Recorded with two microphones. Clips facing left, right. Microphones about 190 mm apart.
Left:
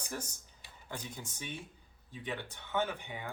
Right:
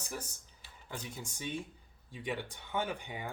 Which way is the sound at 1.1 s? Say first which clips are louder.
Right 4 dB; 10° right (ahead or behind).